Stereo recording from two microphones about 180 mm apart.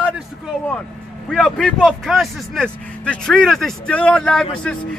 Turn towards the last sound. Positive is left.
turn(degrees=5)  # may be behind; listen again after turning